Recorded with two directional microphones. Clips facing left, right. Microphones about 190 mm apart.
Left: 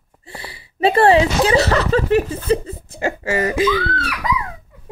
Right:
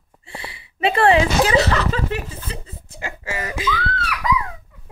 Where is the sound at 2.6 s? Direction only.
50° left (ahead or behind).